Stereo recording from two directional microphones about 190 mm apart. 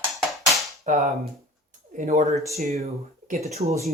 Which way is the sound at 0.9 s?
40° right (ahead or behind).